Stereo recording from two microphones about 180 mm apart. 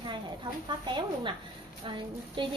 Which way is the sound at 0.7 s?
25° right (ahead or behind).